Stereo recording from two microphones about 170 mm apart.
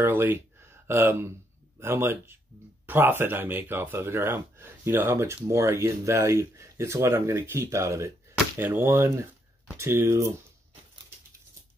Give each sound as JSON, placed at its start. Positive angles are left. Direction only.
{"t": 0.0, "sound": "speech", "side_deg": -10}